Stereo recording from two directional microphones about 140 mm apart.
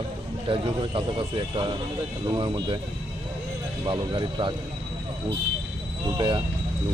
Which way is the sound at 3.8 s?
35° right (ahead or behind).